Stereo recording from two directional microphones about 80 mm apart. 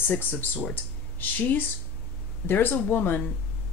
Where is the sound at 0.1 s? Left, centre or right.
Left.